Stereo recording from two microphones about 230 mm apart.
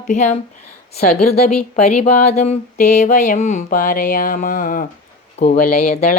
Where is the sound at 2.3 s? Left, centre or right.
Left.